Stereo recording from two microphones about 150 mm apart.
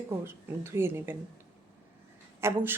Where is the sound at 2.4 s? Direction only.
15° right (ahead or behind).